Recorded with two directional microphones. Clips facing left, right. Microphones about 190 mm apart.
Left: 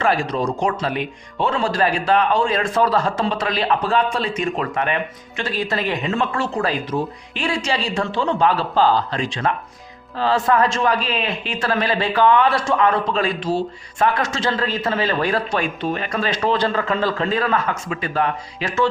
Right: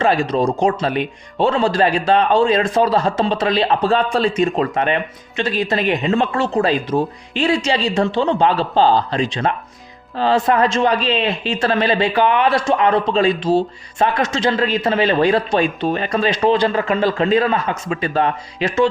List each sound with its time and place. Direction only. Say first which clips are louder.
0.0 s speech: right 4 dB; 25° right (ahead or behind)